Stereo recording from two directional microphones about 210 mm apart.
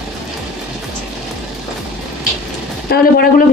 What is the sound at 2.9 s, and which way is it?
Speech, 45° left (ahead or behind).